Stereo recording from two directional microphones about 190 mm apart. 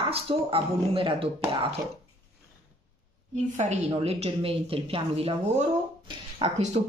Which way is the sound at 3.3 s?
40° right (ahead or behind).